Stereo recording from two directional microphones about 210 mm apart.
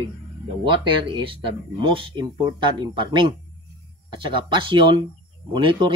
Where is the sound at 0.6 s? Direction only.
25° right (ahead or behind).